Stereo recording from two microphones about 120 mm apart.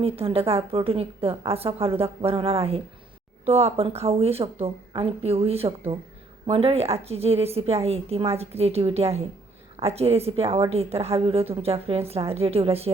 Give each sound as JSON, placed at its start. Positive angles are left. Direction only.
{"t": 0.0, "sound": "a woman's voice", "side_deg": -55}